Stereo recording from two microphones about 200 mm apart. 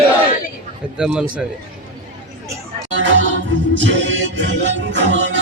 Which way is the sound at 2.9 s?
65° right (ahead or behind).